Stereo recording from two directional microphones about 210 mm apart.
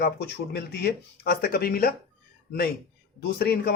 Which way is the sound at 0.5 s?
50° left (ahead or behind).